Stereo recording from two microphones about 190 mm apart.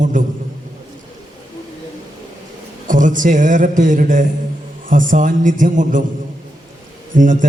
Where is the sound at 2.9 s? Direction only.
45° right (ahead or behind).